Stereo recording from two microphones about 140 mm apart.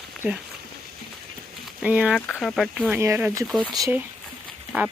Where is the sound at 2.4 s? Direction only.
Centre (ahead or behind).